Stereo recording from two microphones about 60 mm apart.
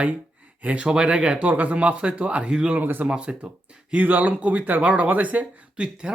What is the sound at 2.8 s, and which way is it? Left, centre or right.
Speech, right.